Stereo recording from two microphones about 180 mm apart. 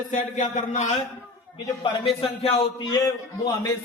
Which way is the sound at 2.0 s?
35° left (ahead or behind).